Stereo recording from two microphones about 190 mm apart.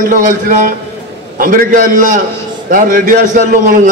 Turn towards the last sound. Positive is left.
turn(degrees=-45)  # may be behind; listen again after turning